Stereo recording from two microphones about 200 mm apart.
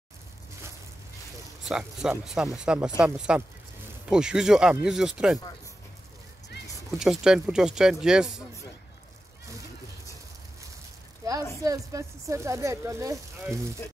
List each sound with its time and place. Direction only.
1.6 s speech: 5° right (ahead or behind)
7.0 s speech: 5° right (ahead or behind)
11.2 s a sound: 15° right (ahead or behind)
11.6 s speech: 15° right (ahead or behind)